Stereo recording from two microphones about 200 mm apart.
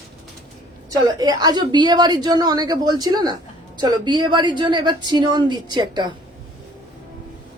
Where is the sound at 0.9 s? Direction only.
20° right (ahead or behind).